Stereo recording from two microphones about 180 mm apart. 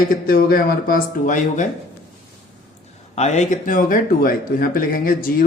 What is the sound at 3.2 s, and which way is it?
Speech, 40° left (ahead or behind).